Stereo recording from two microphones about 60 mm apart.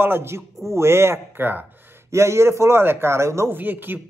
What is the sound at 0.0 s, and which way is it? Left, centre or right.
A man's voice, right.